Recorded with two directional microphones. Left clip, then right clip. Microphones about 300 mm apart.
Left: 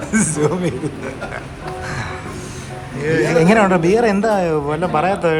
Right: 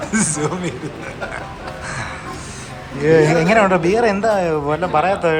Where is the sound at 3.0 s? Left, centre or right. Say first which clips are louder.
Right 5 dB; centre.